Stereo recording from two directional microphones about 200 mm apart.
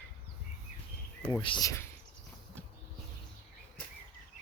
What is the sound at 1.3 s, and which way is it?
Speech, 20° left (ahead or behind).